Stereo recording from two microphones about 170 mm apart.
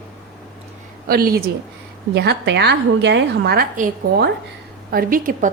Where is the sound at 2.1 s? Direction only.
80° right.